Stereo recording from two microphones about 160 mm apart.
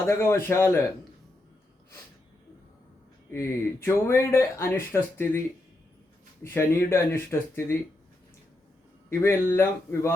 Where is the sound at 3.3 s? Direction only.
15° left (ahead or behind).